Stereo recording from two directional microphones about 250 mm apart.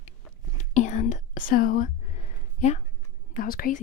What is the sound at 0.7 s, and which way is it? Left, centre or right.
Whispering, left.